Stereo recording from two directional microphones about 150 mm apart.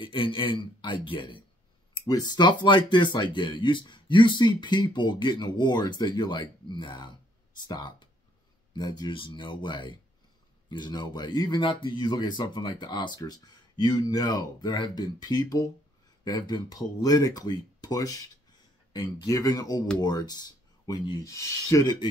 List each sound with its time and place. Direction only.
0.0 s speech: 35° left (ahead or behind)